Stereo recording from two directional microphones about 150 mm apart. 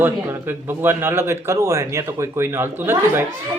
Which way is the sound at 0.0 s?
15° right (ahead or behind).